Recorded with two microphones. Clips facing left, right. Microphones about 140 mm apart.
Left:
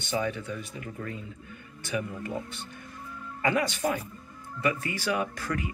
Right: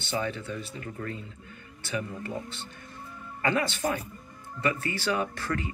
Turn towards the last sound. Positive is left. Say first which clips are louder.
# even
turn(degrees=15)  # may be behind; listen again after turning